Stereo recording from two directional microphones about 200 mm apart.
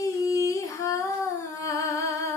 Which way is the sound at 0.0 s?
15° left (ahead or behind).